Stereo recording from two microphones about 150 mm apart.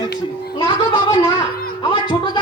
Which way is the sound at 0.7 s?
30° left (ahead or behind).